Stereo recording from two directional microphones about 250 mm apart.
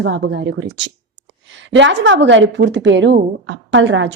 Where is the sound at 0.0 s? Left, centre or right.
Right.